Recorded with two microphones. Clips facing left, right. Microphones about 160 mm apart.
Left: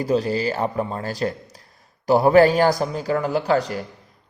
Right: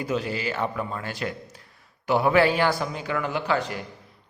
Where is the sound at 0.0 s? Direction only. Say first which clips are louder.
Left 7 dB; 35° left (ahead or behind).